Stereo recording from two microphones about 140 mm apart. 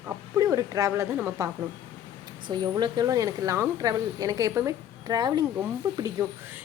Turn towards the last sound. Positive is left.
turn(degrees=-25)  # may be behind; listen again after turning